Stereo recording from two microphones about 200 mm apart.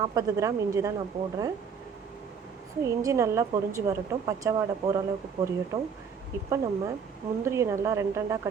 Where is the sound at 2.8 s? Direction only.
15° right (ahead or behind).